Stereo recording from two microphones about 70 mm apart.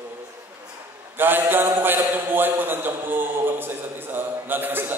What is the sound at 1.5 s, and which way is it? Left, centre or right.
A man's voice, right.